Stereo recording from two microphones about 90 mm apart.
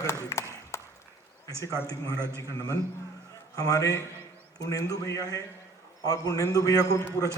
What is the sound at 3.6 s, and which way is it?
A man's voice, 40° left (ahead or behind).